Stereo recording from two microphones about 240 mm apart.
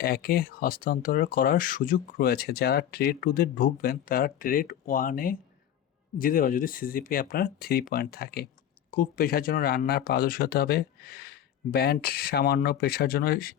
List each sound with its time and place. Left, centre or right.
0.0 s speech: left